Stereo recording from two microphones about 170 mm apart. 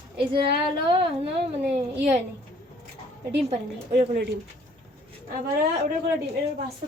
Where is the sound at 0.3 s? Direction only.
30° right (ahead or behind).